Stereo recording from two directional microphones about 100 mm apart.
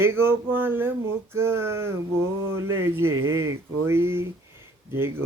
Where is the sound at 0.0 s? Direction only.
20° right (ahead or behind).